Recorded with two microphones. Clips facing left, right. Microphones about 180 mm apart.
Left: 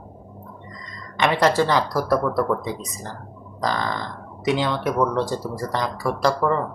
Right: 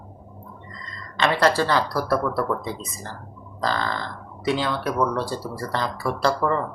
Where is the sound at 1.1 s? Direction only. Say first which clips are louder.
Left 1 dB; 15° left (ahead or behind).